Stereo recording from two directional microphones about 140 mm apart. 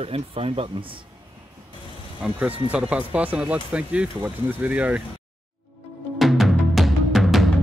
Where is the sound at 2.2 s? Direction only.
10° right (ahead or behind).